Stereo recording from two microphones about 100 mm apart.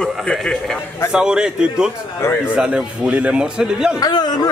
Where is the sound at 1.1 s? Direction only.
5° right (ahead or behind).